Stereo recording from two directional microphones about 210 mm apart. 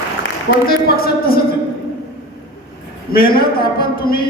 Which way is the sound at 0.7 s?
45° left (ahead or behind).